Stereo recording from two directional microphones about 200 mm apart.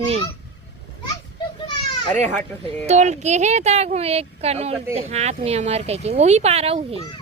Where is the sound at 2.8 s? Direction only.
35° right (ahead or behind).